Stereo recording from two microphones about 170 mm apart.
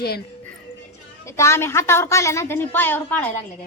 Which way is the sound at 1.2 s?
15° left (ahead or behind).